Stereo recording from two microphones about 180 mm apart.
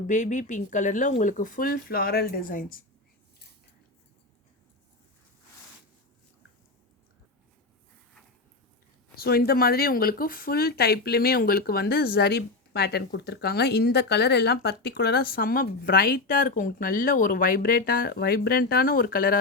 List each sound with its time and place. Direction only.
0.1 s speech: 45° left (ahead or behind)
9.1 s speech: 60° left (ahead or behind)